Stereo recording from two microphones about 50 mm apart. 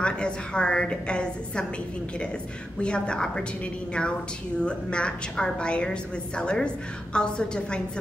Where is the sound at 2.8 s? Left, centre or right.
Centre.